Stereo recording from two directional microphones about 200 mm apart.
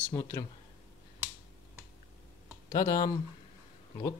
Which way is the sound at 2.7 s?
15° left (ahead or behind).